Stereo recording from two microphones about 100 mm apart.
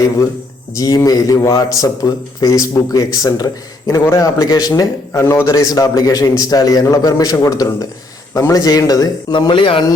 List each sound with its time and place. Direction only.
0.8 s speech: 40° left (ahead or behind)
9.3 s speech: 50° left (ahead or behind)